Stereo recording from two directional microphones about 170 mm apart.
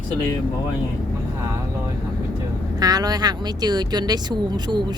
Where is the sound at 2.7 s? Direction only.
20° right (ahead or behind).